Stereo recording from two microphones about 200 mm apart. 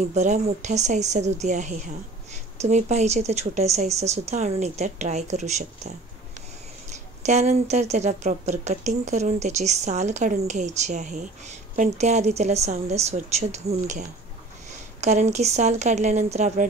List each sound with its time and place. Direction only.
0.1 s a woman's voice: 35° right (ahead or behind)
7.2 s a woman's voice: 35° right (ahead or behind)